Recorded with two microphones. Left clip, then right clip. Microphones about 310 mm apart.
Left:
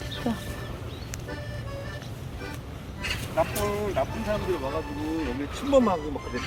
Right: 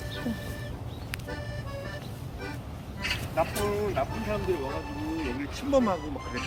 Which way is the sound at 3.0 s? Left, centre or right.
Left.